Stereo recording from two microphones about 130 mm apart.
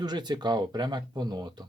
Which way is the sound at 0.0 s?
35° right (ahead or behind).